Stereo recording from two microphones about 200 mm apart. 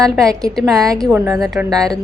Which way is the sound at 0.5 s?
Centre (ahead or behind).